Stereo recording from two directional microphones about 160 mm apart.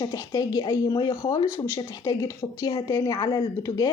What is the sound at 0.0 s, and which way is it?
Speech, 20° left (ahead or behind).